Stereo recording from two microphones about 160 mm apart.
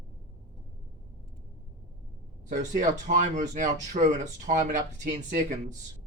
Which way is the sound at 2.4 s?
50° right (ahead or behind).